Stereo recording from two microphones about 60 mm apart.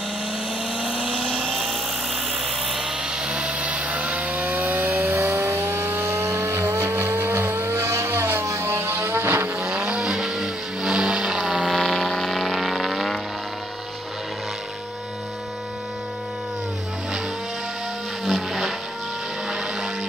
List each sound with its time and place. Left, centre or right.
0.7 s vehicle: centre
1.5 s helicopter: centre
2.7 s chainsaw: centre; by 8.5 s right
8.5 s music: right
9.6 s vehicle: centre
18.2 s vehicle: centre